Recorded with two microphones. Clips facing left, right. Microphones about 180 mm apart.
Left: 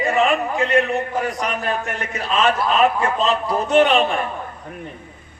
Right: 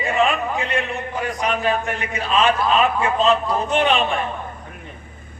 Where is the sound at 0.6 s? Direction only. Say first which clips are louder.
Left 6 dB; 40° left (ahead or behind).